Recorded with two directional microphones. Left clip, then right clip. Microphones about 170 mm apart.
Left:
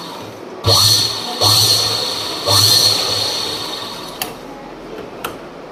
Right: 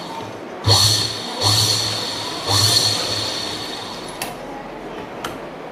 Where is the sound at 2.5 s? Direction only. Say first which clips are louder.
Left 5 dB; 65° left (ahead or behind).